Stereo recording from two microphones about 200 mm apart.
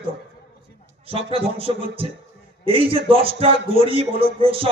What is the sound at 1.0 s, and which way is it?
A man's voice, 30° right (ahead or behind).